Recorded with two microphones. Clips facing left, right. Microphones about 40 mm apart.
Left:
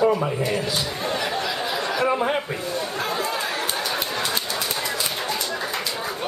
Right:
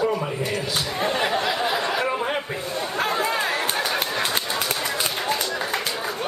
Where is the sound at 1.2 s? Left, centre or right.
Right.